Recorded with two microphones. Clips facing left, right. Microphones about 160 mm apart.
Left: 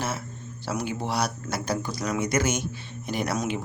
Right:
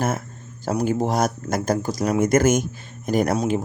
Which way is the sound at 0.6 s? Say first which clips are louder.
Right 8 dB; 45° right (ahead or behind).